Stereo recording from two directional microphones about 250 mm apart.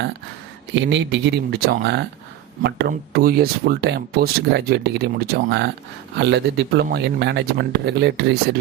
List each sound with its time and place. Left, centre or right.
0.7 s speech: right